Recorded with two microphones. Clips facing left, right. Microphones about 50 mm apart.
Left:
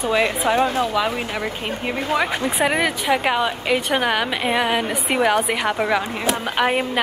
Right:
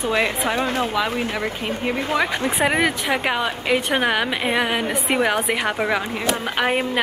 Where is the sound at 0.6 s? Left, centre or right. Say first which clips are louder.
Left 2 dB; right.